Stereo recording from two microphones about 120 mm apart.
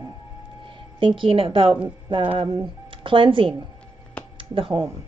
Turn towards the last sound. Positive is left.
turn(degrees=-45)  # may be behind; listen again after turning